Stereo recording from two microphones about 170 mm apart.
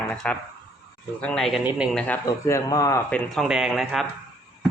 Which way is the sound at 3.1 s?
Centre (ahead or behind).